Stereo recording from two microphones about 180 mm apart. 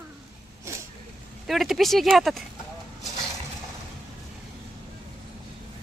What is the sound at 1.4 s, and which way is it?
Speech, centre (ahead or behind).